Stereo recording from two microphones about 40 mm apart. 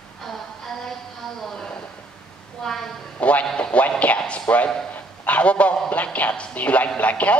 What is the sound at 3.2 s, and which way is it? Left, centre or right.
Music, left.